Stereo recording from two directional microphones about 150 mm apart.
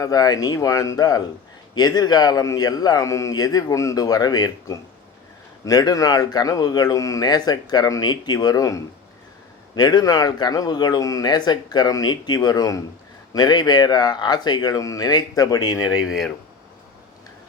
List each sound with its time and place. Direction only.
0.0 s speech: 25° left (ahead or behind)